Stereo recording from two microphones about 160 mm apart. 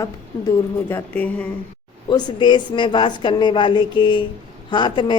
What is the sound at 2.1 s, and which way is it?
Speech, 25° left (ahead or behind).